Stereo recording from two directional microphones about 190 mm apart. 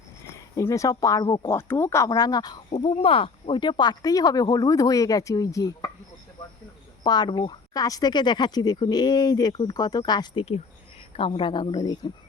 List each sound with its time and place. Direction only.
0.3 s speech: 15° left (ahead or behind)
7.0 s speech: 25° left (ahead or behind)